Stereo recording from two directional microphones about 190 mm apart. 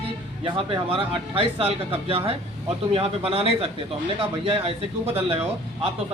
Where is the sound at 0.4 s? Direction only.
30° right (ahead or behind).